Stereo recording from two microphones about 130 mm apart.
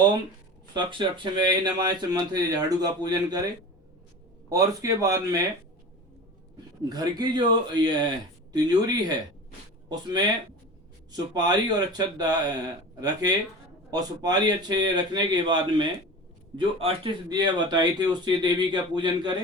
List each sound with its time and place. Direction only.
0.7 s speech: 35° right (ahead or behind)
4.4 s speech: 25° right (ahead or behind)
6.8 s speech: 30° right (ahead or behind)
13.9 s a man's voice: 30° right (ahead or behind)
17.2 s speech: 30° right (ahead or behind)